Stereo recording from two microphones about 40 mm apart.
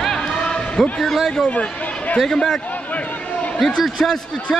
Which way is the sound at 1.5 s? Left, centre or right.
Left.